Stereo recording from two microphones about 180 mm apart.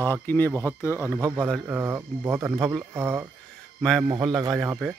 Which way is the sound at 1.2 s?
20° right (ahead or behind).